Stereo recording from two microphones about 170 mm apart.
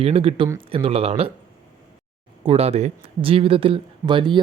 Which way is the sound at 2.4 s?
35° right (ahead or behind).